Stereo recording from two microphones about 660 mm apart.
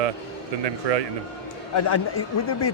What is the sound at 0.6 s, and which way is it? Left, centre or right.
Speech, right.